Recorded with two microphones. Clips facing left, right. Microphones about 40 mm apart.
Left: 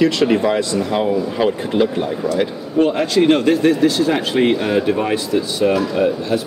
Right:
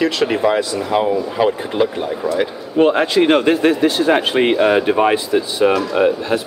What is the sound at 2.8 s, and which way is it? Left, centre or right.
Speech, right.